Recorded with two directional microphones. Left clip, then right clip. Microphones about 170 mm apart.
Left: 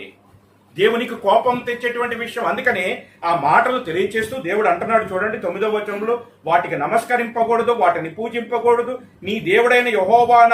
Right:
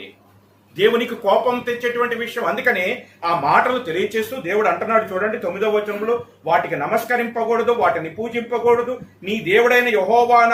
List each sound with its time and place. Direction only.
0.8 s speech: centre (ahead or behind)